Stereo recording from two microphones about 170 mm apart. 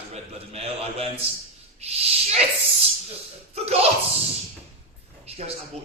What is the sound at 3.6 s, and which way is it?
Speech, 35° right (ahead or behind).